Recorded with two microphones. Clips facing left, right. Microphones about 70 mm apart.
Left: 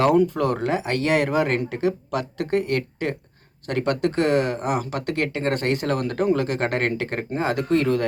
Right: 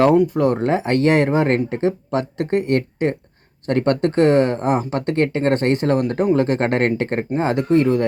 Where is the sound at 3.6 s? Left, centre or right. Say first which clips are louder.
Right 5 dB; right.